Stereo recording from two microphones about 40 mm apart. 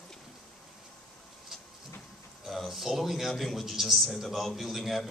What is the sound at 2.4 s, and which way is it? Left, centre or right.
A man's voice, centre.